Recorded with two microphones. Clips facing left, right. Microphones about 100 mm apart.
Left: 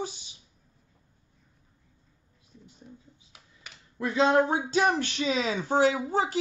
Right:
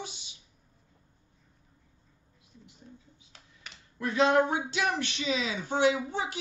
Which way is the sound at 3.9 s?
25° left (ahead or behind).